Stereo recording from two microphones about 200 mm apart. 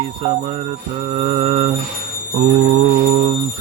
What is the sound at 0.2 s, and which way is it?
Mantra, 30° right (ahead or behind).